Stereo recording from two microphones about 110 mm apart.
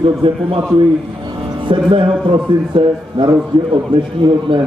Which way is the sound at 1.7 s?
50° right (ahead or behind).